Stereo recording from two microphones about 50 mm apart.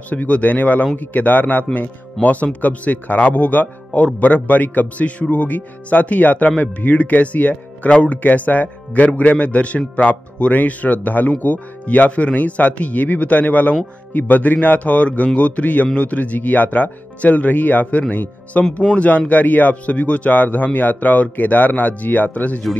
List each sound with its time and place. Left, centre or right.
0.1 s a man's voice: left
8.2 s a man's voice: left